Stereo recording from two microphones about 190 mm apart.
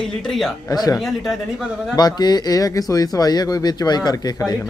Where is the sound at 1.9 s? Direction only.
20° left (ahead or behind).